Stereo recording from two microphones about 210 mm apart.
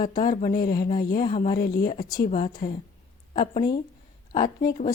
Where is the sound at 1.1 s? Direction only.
35° left (ahead or behind).